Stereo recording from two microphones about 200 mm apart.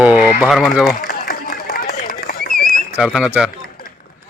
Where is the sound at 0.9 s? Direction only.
45° left (ahead or behind).